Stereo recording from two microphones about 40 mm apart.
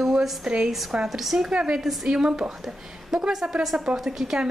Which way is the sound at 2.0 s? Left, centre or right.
Centre.